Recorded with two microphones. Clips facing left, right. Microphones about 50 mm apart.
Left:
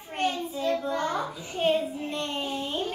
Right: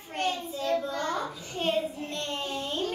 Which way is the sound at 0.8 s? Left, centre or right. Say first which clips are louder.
Left 3 dB; left.